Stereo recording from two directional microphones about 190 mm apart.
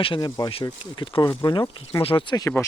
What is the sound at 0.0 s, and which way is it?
Speech, 25° left (ahead or behind).